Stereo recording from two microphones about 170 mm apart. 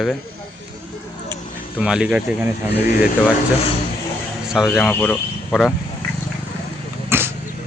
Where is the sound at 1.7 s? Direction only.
5° right (ahead or behind).